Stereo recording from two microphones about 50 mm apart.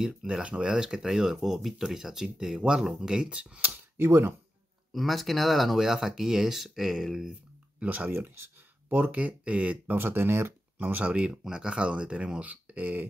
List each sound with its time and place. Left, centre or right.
0.0 s speech: centre
4.0 s speech: right
4.9 s speech: centre
7.8 s speech: right
8.1 s speech: right
8.8 s speech: right
9.2 s speech: right
9.9 s speech: right
10.8 s speech: right
11.1 s speech: right